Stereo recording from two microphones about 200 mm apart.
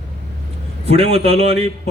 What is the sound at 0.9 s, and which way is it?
Speech, 30° right (ahead or behind).